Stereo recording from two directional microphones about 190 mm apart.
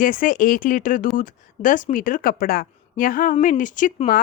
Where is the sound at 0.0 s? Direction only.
45° left (ahead or behind).